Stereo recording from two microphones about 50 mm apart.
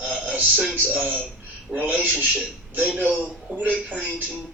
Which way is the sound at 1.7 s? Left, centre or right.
Right.